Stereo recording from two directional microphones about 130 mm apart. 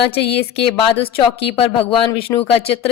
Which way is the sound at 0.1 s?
50° left (ahead or behind).